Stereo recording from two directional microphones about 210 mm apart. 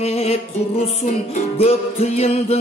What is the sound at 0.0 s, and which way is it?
Music, 30° left (ahead or behind).